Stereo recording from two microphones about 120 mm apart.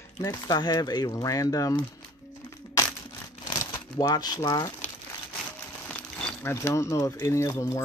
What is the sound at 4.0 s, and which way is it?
Speech, 35° left (ahead or behind).